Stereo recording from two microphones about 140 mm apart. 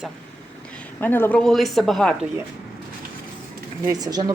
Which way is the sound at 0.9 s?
15° left (ahead or behind).